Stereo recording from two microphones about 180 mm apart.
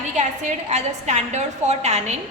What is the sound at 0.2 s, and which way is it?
A woman's voice, 40° right (ahead or behind).